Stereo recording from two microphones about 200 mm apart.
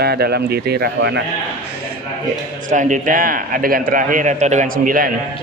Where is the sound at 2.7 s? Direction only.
40° right (ahead or behind).